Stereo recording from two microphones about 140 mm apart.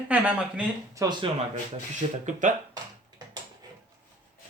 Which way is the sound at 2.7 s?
30° right (ahead or behind).